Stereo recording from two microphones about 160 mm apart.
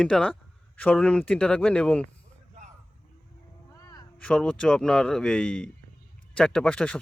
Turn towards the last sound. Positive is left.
turn(degrees=5)  # may be behind; listen again after turning